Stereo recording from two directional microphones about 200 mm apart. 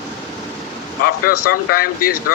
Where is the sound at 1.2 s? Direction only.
45° left (ahead or behind).